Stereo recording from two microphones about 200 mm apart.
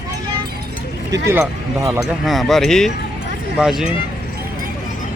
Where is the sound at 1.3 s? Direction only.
10° right (ahead or behind).